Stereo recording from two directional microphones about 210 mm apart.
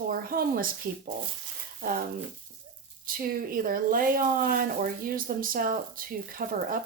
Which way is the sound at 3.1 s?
45° right (ahead or behind).